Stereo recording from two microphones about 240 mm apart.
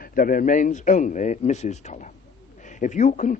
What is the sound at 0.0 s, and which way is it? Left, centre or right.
Speech, left.